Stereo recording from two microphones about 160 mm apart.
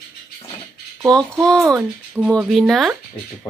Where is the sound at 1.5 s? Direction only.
5° left (ahead or behind).